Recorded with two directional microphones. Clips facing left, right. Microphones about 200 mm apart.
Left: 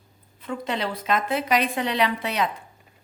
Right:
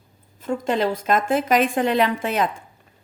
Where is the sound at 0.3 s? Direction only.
45° right (ahead or behind).